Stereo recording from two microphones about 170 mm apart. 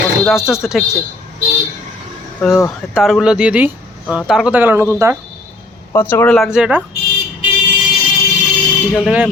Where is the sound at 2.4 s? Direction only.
10° left (ahead or behind).